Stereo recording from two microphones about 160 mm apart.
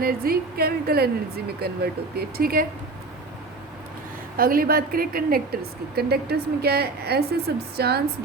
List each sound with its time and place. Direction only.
0.0 s a woman's voice: 70° right (ahead or behind)
4.4 s a woman's voice: 65° right (ahead or behind)
6.0 s a woman's voice: 85° right